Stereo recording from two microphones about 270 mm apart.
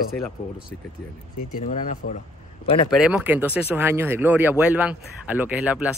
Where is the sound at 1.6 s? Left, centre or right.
Left.